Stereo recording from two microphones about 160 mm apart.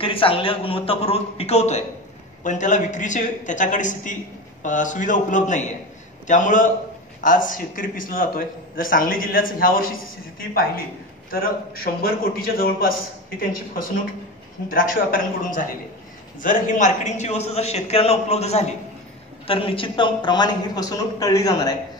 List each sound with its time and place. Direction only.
0.0 s a man's voice: 35° left (ahead or behind); by 9.8 s 60° left (ahead or behind)
11.2 s a man's voice: 65° left (ahead or behind); by 21.7 s 25° left (ahead or behind)